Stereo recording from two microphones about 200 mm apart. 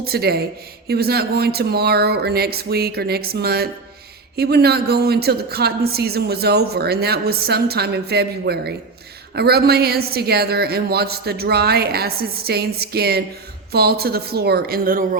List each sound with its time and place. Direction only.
0.0 s a woman's voice: 50° right (ahead or behind)